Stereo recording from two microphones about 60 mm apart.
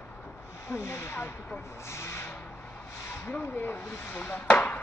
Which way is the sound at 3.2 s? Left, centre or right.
Left.